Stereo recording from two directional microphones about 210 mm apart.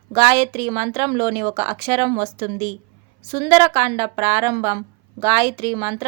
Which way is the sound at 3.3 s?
20° right (ahead or behind).